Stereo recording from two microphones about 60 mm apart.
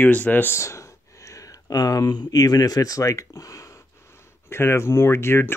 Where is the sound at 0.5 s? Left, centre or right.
Left.